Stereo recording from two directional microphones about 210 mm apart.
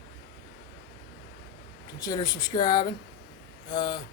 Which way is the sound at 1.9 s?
20° left (ahead or behind).